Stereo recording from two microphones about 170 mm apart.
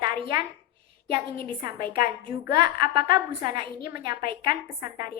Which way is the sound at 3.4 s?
25° right (ahead or behind).